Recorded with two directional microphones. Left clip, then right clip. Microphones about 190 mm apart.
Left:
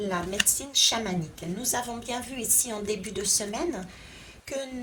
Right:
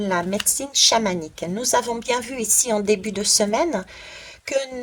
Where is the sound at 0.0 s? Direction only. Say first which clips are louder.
Right 5 dB; 35° right (ahead or behind).